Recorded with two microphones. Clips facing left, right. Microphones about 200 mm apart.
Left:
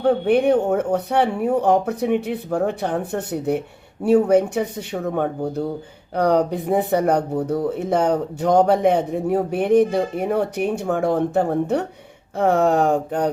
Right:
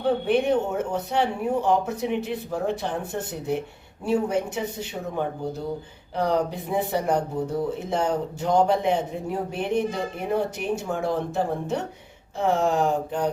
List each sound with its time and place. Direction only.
0.0 s speech: 55° left (ahead or behind)